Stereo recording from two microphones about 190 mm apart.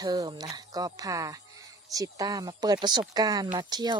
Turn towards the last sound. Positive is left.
turn(degrees=-20)  # may be behind; listen again after turning